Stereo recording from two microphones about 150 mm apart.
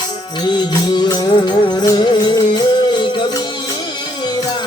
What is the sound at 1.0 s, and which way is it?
Music, 25° left (ahead or behind).